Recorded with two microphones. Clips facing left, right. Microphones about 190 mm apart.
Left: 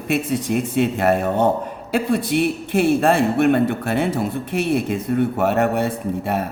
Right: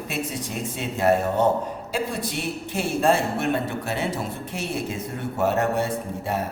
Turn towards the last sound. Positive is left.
turn(degrees=60)  # may be behind; listen again after turning